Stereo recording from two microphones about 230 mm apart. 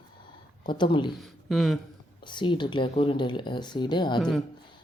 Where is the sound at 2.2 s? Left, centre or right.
Left.